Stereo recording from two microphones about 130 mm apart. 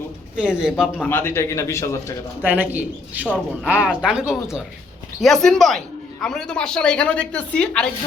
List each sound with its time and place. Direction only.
0.3 s speech: 5° right (ahead or behind)
0.9 s a man's voice: 15° left (ahead or behind)
2.4 s speech: 15° right (ahead or behind)
3.2 s a woman's voice: 10° left (ahead or behind)
3.7 s a woman's voice: 10° right (ahead or behind); by 7.9 s 10° left (ahead or behind)